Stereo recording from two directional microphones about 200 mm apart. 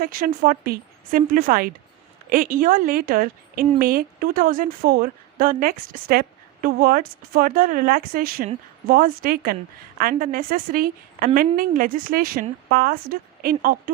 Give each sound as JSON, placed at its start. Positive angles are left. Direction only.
{"t": 0.0, "sound": "a woman's voice", "side_deg": -45}